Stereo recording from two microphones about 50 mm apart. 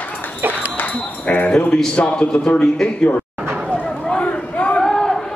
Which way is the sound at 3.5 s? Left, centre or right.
Centre.